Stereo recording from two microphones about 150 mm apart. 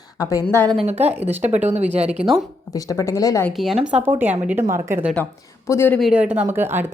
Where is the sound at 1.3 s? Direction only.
10° right (ahead or behind).